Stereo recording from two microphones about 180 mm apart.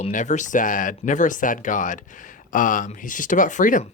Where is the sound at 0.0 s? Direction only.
45° left (ahead or behind).